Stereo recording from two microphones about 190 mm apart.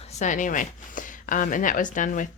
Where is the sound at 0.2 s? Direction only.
40° left (ahead or behind).